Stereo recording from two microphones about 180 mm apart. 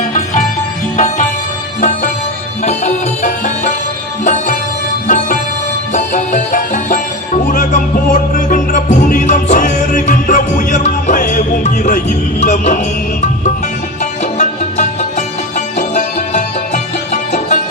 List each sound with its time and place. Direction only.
0.9 s music: 40° left (ahead or behind)
14.0 s music: 40° left (ahead or behind)